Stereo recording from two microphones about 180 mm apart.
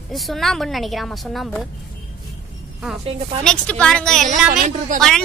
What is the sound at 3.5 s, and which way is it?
Speech, 5° left (ahead or behind).